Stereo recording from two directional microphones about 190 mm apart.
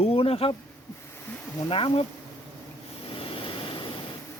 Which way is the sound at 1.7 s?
30° left (ahead or behind).